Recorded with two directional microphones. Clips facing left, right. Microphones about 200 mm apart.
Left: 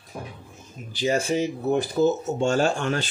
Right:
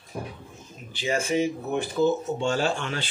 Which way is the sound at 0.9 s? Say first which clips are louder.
Left 2 dB; 40° left (ahead or behind).